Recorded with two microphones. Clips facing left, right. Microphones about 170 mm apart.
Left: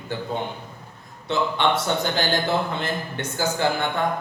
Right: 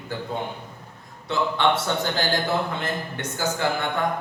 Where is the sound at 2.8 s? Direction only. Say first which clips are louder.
Left 1 dB; 30° left (ahead or behind).